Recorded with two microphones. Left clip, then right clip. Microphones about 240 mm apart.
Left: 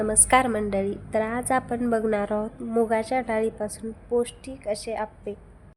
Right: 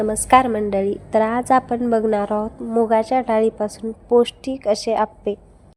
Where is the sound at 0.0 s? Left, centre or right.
Centre.